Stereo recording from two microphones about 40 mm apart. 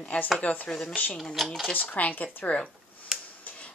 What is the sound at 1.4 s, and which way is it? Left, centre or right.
Speech, centre.